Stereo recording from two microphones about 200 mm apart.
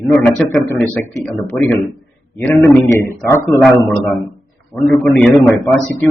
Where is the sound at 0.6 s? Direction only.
15° left (ahead or behind).